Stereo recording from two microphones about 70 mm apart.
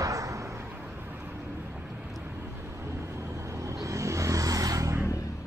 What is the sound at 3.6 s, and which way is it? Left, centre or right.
Vehicle, right.